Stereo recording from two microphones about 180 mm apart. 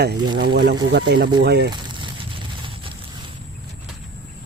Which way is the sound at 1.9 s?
25° right (ahead or behind).